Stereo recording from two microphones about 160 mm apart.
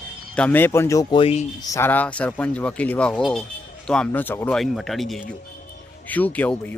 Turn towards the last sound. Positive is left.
turn(degrees=10)  # may be behind; listen again after turning